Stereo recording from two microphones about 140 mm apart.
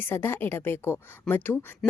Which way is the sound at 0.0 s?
15° left (ahead or behind).